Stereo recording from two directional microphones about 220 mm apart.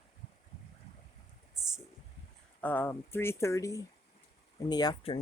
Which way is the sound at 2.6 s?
10° left (ahead or behind).